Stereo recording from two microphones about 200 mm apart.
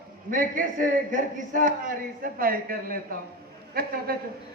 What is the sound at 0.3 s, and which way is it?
A man's voice, 40° right (ahead or behind).